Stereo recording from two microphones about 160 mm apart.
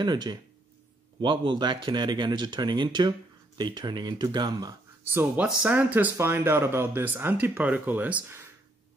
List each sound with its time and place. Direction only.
0.0 s speech: 25° right (ahead or behind)
5.1 s speech: 10° right (ahead or behind)